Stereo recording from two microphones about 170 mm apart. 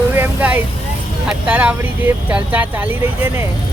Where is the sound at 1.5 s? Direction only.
10° right (ahead or behind).